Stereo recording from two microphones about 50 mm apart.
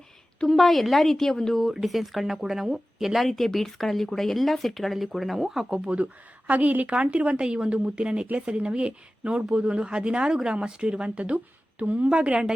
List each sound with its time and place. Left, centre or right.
0.4 s a woman's voice: centre